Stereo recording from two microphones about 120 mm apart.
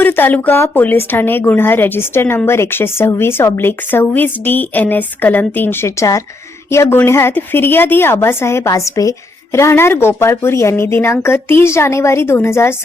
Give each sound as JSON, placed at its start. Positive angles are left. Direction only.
{"t": 0.0, "sound": "a woman's voice", "side_deg": 15}